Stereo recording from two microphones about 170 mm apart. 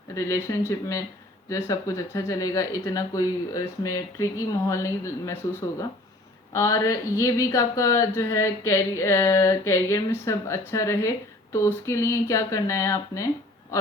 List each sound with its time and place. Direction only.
0.1 s speech: 15° left (ahead or behind)